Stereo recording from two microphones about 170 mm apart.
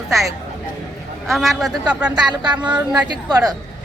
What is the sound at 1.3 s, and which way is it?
A woman's voice, centre (ahead or behind).